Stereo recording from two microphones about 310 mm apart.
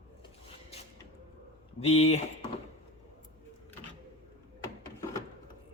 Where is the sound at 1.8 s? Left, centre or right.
Left.